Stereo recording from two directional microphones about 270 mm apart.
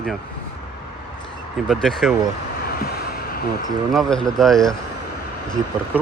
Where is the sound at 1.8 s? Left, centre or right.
Centre.